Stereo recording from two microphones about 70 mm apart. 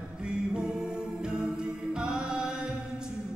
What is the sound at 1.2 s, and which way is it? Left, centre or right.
Music, centre.